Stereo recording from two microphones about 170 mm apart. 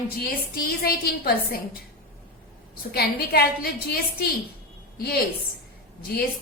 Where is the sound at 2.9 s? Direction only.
65° left (ahead or behind).